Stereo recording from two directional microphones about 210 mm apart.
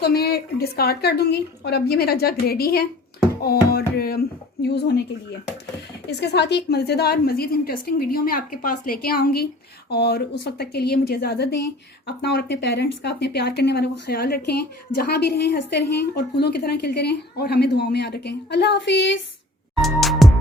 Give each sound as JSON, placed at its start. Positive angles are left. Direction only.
{"t": 0.0, "sound": "a woman's voice", "side_deg": 50}
{"t": 6.1, "sound": "a woman's voice", "side_deg": 50}
{"t": 19.7, "sound": "music", "side_deg": 0}